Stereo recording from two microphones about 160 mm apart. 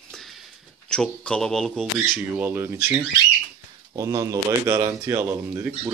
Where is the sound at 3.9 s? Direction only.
20° right (ahead or behind).